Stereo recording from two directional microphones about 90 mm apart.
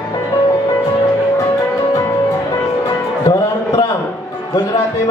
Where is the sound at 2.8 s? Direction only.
45° left (ahead or behind).